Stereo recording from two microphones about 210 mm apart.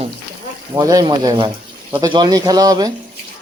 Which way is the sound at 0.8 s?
20° right (ahead or behind).